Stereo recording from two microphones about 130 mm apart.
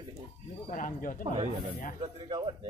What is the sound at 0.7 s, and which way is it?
Speech, 90° left.